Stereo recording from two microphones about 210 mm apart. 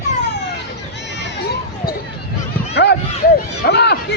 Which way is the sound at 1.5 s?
45° left (ahead or behind).